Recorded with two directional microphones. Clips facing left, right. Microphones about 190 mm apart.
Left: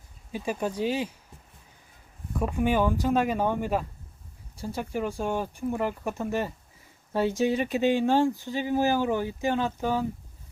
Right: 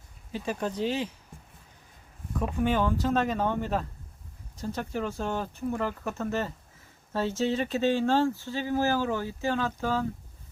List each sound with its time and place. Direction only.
0.3 s speech: 10° left (ahead or behind)
2.4 s speech: 10° left (ahead or behind)